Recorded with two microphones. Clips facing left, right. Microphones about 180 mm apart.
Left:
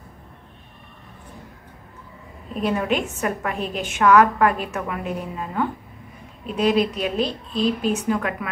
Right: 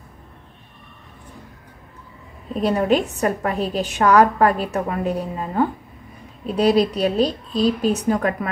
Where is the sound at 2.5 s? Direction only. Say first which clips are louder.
Right 4 dB; 35° right (ahead or behind).